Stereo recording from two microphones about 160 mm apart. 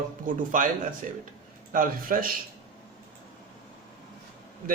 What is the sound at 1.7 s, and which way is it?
Speech, 60° right (ahead or behind).